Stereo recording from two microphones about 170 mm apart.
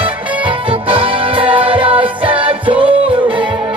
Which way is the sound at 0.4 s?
30° right (ahead or behind).